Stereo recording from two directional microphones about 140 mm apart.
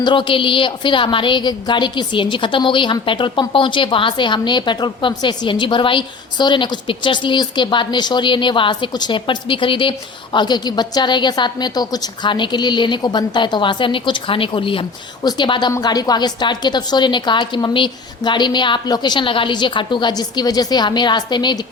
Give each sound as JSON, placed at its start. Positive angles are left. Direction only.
{"t": 0.0, "sound": "a woman's voice", "side_deg": 35}